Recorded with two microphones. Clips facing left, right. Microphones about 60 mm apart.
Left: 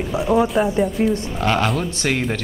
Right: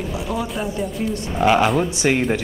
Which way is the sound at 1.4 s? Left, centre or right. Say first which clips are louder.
Right 6 dB; centre.